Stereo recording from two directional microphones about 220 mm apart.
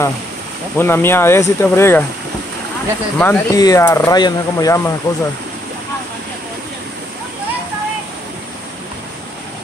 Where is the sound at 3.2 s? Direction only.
10° left (ahead or behind).